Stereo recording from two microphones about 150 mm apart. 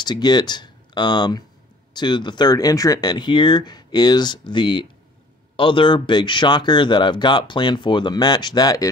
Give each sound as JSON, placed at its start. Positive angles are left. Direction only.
{"t": 0.0, "sound": "speech", "side_deg": 30}